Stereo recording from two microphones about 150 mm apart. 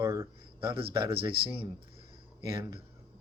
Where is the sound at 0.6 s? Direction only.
35° right (ahead or behind).